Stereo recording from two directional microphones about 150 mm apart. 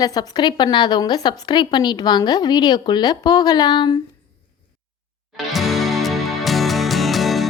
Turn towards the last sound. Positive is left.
turn(degrees=0)  # may be behind; listen again after turning